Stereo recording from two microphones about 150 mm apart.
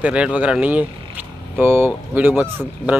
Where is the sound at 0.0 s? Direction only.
5° right (ahead or behind).